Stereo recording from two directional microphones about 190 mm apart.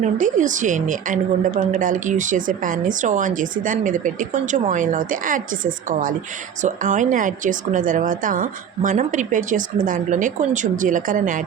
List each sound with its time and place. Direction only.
0.0 s a woman's voice: 40° right (ahead or behind)